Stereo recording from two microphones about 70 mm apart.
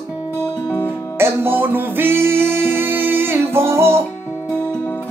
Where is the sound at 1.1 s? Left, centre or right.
Right.